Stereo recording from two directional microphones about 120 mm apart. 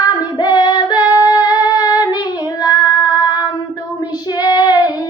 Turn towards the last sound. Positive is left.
turn(degrees=35)  # may be behind; listen again after turning